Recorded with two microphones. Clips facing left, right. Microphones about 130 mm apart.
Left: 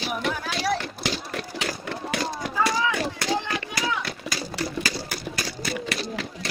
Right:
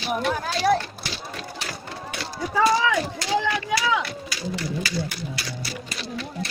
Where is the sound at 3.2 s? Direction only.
60° left (ahead or behind).